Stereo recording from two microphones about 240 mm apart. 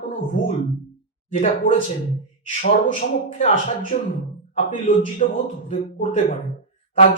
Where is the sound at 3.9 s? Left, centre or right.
Left.